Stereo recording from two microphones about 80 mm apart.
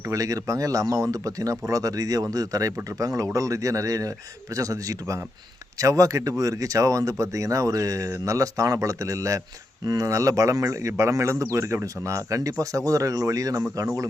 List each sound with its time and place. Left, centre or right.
0.0 s speech: right
9.8 s speech: right
10.1 s speech: right